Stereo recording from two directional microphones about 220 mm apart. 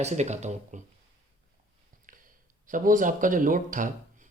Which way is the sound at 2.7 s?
35° right (ahead or behind).